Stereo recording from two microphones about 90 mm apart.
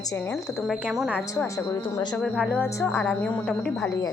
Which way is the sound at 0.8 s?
10° right (ahead or behind).